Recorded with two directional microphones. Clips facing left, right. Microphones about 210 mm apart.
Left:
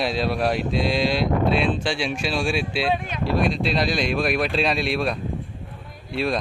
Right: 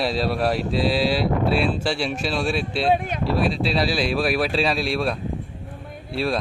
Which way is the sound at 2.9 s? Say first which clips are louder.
Right 4 dB; 50° right (ahead or behind).